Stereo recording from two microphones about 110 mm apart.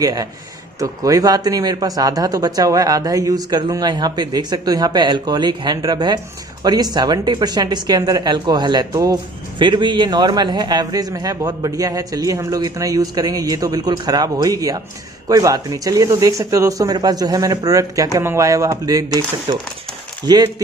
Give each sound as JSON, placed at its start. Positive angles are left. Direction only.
{"t": 0.0, "sound": "speech", "side_deg": -35}
{"t": 9.6, "sound": "speech", "side_deg": -45}
{"t": 19.5, "sound": "speech", "side_deg": -50}
{"t": 20.2, "sound": "speech", "side_deg": -40}